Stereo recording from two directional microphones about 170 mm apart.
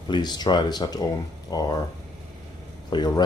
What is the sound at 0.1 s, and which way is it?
Speech, 25° left (ahead or behind).